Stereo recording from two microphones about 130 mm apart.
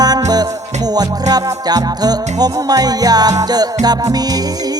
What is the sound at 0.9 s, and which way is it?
Music, 30° right (ahead or behind).